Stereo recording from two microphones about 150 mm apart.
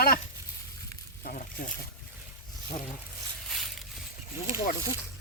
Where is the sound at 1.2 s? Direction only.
65° left (ahead or behind).